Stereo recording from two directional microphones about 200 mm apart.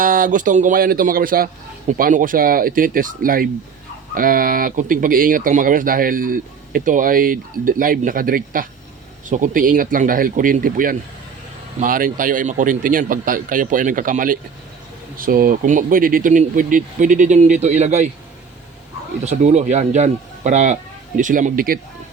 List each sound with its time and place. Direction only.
0.0 s speech: 45° right (ahead or behind)
19.2 s speech: 35° right (ahead or behind)